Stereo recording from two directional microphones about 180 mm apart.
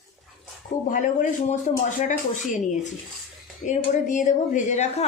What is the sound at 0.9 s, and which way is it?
Speech, 45° left (ahead or behind).